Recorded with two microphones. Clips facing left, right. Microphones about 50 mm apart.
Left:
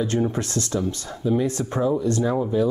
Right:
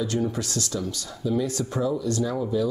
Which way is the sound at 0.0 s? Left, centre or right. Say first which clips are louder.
Left 3 dB; left.